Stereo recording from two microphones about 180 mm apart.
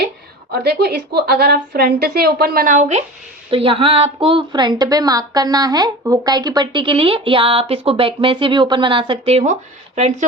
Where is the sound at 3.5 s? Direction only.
30° right (ahead or behind).